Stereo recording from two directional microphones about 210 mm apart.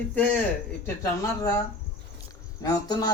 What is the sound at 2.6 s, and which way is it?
Speech, 15° left (ahead or behind).